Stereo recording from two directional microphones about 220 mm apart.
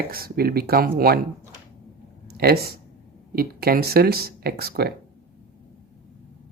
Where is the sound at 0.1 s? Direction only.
45° right (ahead or behind).